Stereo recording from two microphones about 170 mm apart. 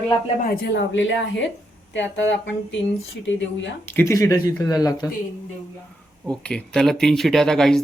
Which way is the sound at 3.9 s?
15° left (ahead or behind).